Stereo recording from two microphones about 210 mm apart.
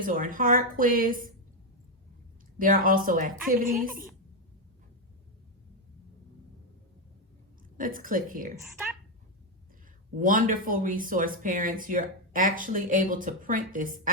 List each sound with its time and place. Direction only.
0.0 s speech: 40° right (ahead or behind)
2.6 s speech: 40° right (ahead or behind)
7.8 s speech: 40° right (ahead or behind)
10.2 s speech: 40° right (ahead or behind)